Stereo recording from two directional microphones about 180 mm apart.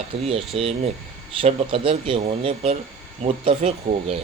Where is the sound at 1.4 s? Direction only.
30° right (ahead or behind).